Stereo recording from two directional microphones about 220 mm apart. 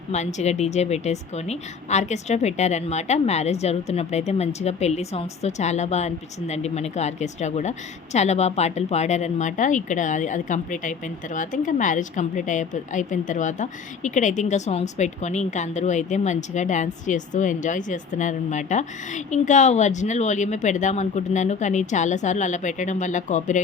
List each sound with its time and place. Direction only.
0.1 s speech: 30° left (ahead or behind)